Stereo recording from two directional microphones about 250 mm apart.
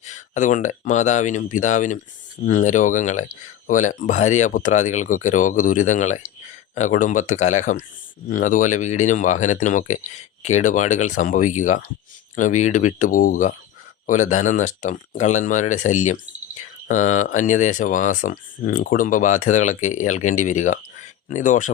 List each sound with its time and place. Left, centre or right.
0.0 s speech: left